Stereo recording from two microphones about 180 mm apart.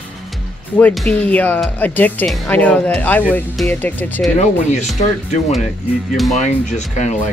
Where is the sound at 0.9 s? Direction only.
5° left (ahead or behind).